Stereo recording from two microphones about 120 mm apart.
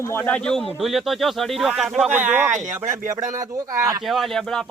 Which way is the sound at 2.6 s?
90° right.